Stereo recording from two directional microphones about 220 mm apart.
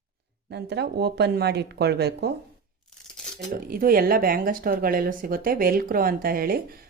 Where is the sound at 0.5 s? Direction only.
50° right (ahead or behind).